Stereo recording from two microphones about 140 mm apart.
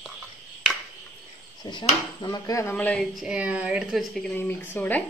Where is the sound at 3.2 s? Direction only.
10° right (ahead or behind).